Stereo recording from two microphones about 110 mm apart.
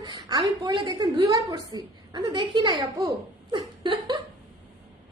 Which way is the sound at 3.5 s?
45° right (ahead or behind).